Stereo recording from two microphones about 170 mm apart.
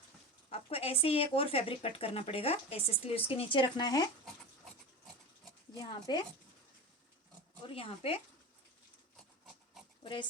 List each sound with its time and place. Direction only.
0.5 s speech: 35° left (ahead or behind)
5.8 s speech: 25° left (ahead or behind)
7.7 s speech: 35° left (ahead or behind)
10.0 s speech: 30° left (ahead or behind)